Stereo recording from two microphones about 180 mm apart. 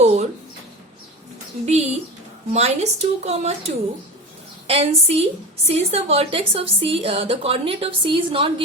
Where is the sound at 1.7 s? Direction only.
35° right (ahead or behind).